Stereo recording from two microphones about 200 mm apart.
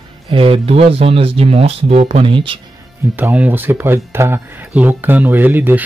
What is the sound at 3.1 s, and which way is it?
Speech, 10° right (ahead or behind).